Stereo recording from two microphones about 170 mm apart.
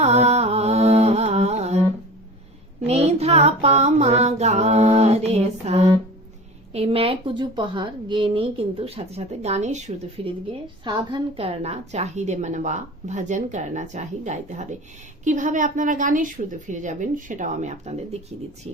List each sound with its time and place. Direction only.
0.0 s carnatic music: 40° right (ahead or behind)
2.8 s music: 40° right (ahead or behind)
6.7 s a woman's voice: 35° right (ahead or behind)
10.2 s a woman's voice: 35° right (ahead or behind)